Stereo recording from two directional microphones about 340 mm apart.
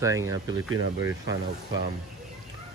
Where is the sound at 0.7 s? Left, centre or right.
Right.